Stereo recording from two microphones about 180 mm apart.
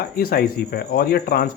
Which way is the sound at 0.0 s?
55° left (ahead or behind).